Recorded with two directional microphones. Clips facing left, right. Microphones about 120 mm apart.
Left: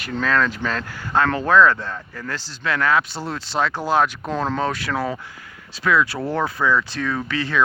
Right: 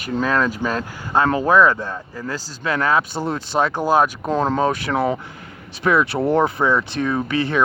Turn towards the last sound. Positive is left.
turn(degrees=-20)  # may be behind; listen again after turning